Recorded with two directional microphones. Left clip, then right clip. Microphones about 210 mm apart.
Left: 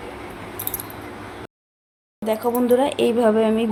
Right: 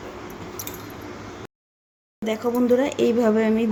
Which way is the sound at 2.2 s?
35° right (ahead or behind).